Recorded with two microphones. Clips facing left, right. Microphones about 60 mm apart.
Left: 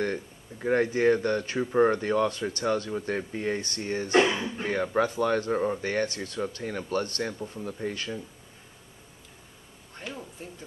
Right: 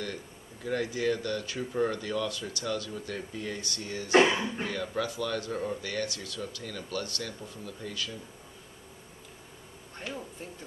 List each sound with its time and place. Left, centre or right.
0.0 s speech: left
4.1 s speech: right
4.6 s speech: left
9.9 s a sound: centre